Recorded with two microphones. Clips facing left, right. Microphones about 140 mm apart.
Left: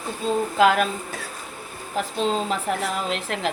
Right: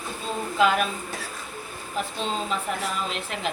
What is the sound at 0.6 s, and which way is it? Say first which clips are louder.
Speech: left 3 dB; 80° left.